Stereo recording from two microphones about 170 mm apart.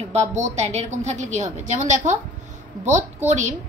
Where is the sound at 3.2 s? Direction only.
45° right (ahead or behind).